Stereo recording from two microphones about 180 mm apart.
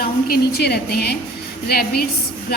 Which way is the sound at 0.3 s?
60° left (ahead or behind).